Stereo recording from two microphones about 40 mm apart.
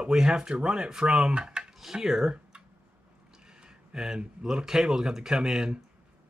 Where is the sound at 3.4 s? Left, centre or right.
Centre.